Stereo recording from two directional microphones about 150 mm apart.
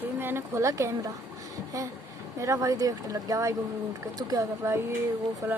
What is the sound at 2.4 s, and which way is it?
Speech, 20° right (ahead or behind).